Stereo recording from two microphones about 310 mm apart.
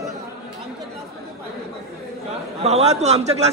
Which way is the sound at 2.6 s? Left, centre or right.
Right.